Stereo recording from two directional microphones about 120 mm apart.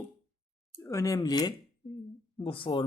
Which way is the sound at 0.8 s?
25° left (ahead or behind).